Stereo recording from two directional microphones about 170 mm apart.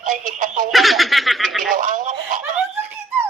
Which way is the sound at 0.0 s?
50° right (ahead or behind).